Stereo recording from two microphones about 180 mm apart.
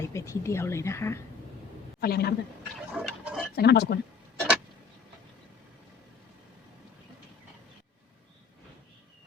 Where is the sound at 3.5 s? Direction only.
65° left (ahead or behind).